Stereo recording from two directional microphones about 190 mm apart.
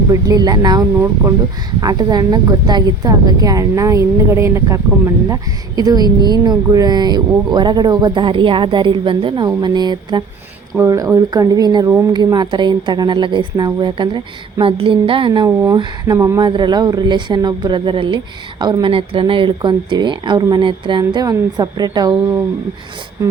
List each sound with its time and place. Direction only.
0.1 s a woman's voice: 20° right (ahead or behind)
23.2 s rub: 15° right (ahead or behind)